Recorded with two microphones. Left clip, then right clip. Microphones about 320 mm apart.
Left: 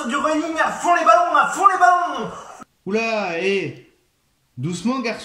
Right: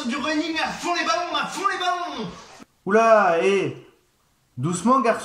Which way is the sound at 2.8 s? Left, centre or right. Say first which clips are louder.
Right 6 dB; right.